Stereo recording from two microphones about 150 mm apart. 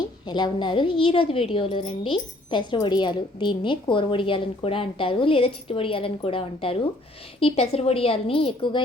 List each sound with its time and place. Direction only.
0.3 s a woman's voice: 30° left (ahead or behind)